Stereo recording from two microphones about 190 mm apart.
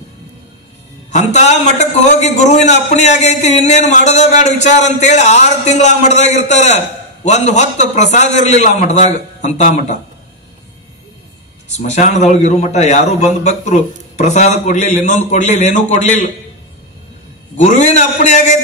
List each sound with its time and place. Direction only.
1.1 s a man's voice: 35° left (ahead or behind)
11.7 s a man's voice: 35° left (ahead or behind)
17.6 s a man's voice: 40° left (ahead or behind)